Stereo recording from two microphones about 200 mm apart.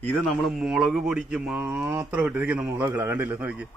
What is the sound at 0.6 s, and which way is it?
Speech, 5° right (ahead or behind).